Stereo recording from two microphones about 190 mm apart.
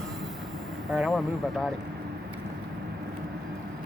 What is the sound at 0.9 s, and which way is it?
Speech, centre (ahead or behind).